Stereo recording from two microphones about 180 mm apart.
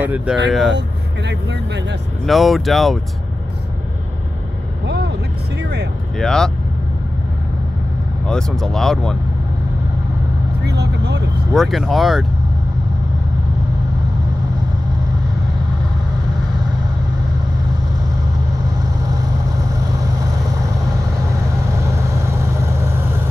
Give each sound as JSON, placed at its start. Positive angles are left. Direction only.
{"t": 0.0, "sound": "speech", "side_deg": -10}
{"t": 0.7, "sound": "speech", "side_deg": -70}
{"t": 2.2, "sound": "speech", "side_deg": 0}
{"t": 4.8, "sound": "vehicle", "side_deg": -70}
{"t": 6.1, "sound": "speech", "side_deg": 5}
{"t": 8.3, "sound": "speech", "side_deg": 5}
{"t": 10.6, "sound": "speech", "side_deg": -70}
{"t": 11.5, "sound": "speech", "side_deg": 0}
{"t": 19.0, "sound": "vehicle", "side_deg": -20}
{"t": 21.7, "sound": "vehicle", "side_deg": -15}